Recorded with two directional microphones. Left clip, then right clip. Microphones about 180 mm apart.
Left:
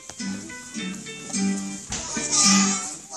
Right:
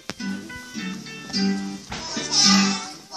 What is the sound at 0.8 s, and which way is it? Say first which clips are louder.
Music: left 1 dB; 15° left (ahead or behind).